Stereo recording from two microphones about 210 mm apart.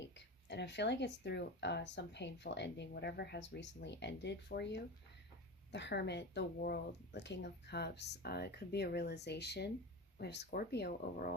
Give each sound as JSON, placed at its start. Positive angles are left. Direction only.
{"t": 0.4, "sound": "speech", "side_deg": 55}